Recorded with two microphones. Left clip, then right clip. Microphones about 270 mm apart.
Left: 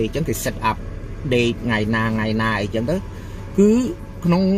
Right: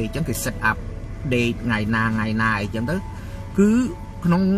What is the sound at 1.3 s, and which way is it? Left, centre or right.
Speech, left.